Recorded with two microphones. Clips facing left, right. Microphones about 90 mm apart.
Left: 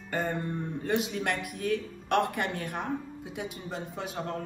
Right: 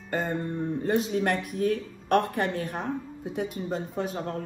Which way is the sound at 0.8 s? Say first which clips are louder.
Right 4 dB; 40° right (ahead or behind).